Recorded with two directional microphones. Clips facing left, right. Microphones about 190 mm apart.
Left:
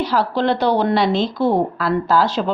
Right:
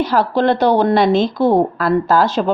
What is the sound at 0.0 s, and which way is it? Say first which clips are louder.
A woman's voice: right 3 dB; 50° right (ahead or behind).